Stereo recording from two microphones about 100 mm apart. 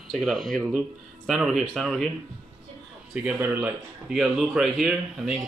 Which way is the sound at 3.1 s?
15° right (ahead or behind).